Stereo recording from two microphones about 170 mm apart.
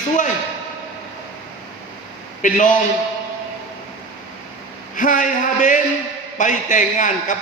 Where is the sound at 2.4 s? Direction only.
50° left (ahead or behind).